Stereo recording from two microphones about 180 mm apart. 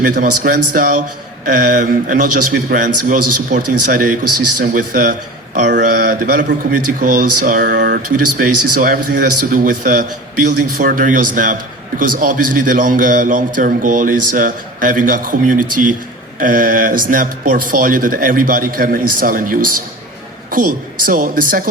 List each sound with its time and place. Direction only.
0.0 s a man's voice: 50° right (ahead or behind)
7.8 s speech: 70° right (ahead or behind)
8.4 s a man's voice: 50° right (ahead or behind)